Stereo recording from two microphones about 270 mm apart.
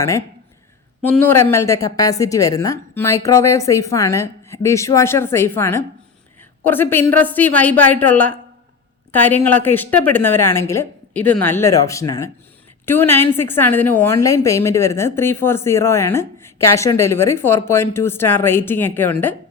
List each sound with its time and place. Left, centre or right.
1.0 s speech: centre